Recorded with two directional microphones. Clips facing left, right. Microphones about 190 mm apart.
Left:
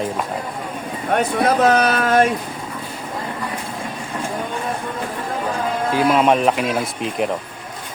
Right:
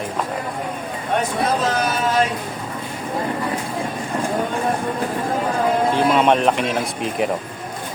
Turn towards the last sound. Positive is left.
turn(degrees=0)  # may be behind; listen again after turning